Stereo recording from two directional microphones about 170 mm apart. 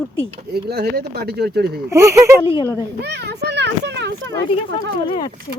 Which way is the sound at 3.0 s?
80° right.